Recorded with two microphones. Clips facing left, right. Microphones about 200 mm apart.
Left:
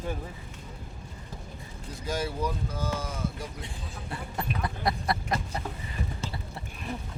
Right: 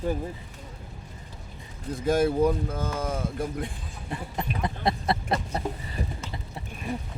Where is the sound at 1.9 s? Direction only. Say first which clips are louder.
Right 9 dB; 55° right (ahead or behind).